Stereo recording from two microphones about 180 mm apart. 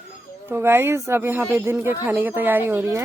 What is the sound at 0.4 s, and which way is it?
Speech, 15° right (ahead or behind).